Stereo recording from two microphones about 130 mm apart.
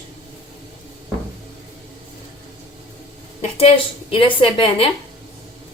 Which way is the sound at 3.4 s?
50° left (ahead or behind).